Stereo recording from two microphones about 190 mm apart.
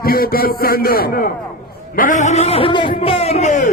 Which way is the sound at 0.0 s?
50° left (ahead or behind).